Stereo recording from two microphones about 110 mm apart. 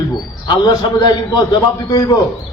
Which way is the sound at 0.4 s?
40° left (ahead or behind).